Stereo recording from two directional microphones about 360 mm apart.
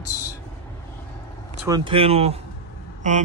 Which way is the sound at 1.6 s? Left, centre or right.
Centre.